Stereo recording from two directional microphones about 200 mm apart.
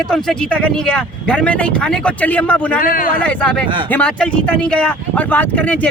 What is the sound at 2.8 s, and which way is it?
Speech, 45° left (ahead or behind).